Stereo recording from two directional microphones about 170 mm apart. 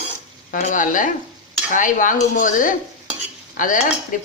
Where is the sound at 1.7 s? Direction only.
50° left (ahead or behind).